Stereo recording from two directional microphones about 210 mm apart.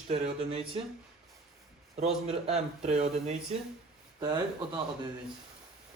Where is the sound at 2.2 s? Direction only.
30° right (ahead or behind).